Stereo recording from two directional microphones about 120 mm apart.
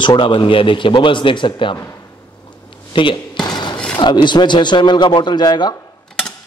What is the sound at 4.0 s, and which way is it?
A man's voice, 40° left (ahead or behind).